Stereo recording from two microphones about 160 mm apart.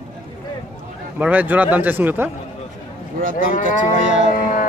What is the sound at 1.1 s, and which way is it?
A man's voice, 10° right (ahead or behind).